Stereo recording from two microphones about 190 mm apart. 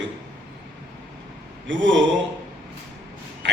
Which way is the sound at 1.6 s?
75° right (ahead or behind).